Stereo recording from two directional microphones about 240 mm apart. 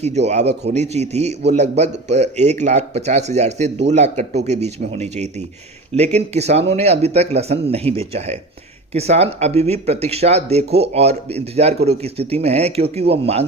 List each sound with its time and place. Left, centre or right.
0.3 s speech: right